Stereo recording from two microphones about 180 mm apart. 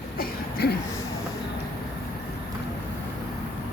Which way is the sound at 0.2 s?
60° left (ahead or behind).